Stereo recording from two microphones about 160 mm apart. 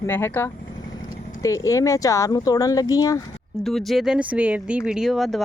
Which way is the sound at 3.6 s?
Centre (ahead or behind).